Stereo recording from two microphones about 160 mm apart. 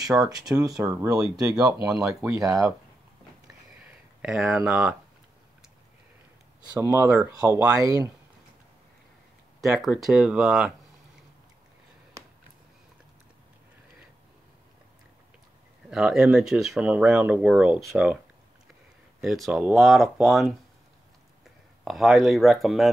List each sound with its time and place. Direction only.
0.2 s speech: 20° right (ahead or behind)
1.9 s speech: 5° right (ahead or behind)
2.3 s speech: 20° right (ahead or behind)
4.2 s speech: 5° right (ahead or behind)
6.7 s speech: 15° right (ahead or behind)
9.6 s speech: centre (ahead or behind)
12.2 s a sound: 20° right (ahead or behind)
15.9 s speech: 5° right (ahead or behind)
19.2 s speech: centre (ahead or behind)
21.8 s speech: centre (ahead or behind)